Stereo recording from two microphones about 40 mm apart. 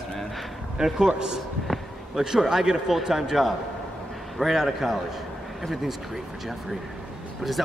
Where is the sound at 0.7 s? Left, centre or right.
Centre.